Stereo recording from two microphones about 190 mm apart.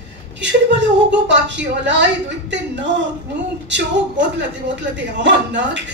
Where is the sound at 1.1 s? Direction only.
70° right (ahead or behind).